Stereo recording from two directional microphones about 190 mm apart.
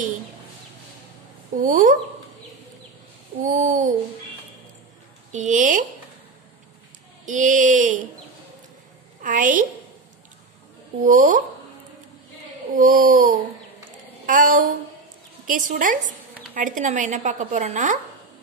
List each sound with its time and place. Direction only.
1.6 s a woman's voice: 45° right (ahead or behind)
3.4 s a woman's voice: 40° right (ahead or behind)
5.3 s a woman's voice: 40° right (ahead or behind)
7.2 s a woman's voice: 40° right (ahead or behind)
9.2 s a woman's voice: 45° right (ahead or behind)
11.0 s a woman's voice: 45° right (ahead or behind)
12.7 s a woman's voice: 45° right (ahead or behind)
14.2 s a sound: 45° right (ahead or behind)
15.4 s a woman's voice: 45° right (ahead or behind)